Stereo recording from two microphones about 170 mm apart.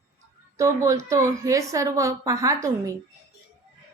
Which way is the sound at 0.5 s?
20° right (ahead or behind).